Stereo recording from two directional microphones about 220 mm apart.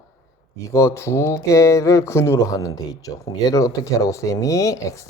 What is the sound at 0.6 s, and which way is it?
Speech, 15° left (ahead or behind).